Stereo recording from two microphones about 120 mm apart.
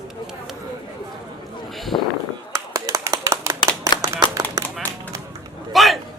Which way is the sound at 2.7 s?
25° right (ahead or behind).